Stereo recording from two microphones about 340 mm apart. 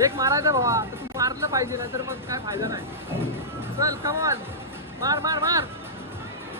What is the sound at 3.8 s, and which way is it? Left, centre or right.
Speech, centre.